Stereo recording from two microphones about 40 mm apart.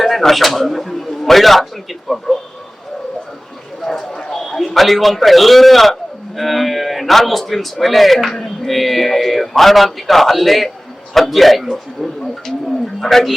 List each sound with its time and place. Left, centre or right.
0.0 s a man's voice: centre
3.8 s a sound: centre
4.3 s a man's voice: centre